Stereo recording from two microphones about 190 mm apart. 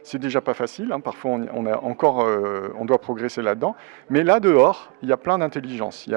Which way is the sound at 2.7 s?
30° right (ahead or behind).